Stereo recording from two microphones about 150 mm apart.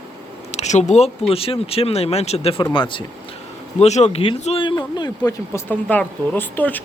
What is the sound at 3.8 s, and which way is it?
A man's voice, 45° left (ahead or behind).